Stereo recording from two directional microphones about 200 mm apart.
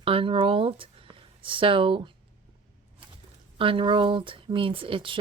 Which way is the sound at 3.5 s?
25° right (ahead or behind).